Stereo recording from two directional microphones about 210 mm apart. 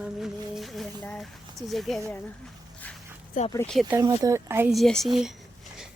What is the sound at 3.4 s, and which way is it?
Speech, 40° left (ahead or behind).